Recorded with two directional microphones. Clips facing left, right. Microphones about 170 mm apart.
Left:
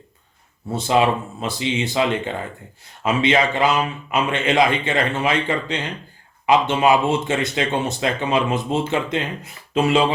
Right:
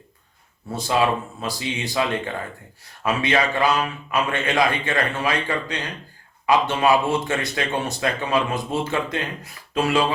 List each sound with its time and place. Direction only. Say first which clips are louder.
0.7 s speech: left 3 dB; 25° left (ahead or behind)